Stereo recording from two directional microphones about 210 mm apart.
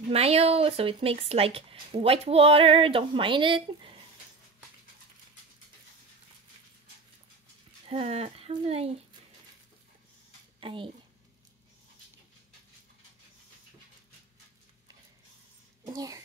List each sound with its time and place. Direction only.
0.1 s speech: 30° right (ahead or behind)
7.9 s speech: 30° right (ahead or behind)
10.6 s a child's voice: 25° right (ahead or behind)
15.8 s a child's voice: 15° right (ahead or behind)